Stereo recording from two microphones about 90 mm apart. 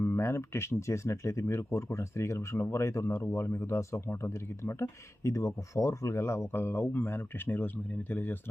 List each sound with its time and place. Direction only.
0.0 s speech: 30° left (ahead or behind)